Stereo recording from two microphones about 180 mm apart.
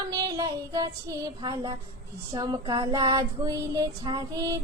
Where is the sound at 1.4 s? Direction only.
25° right (ahead or behind).